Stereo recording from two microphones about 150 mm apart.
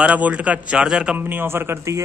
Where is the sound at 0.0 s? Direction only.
10° right (ahead or behind).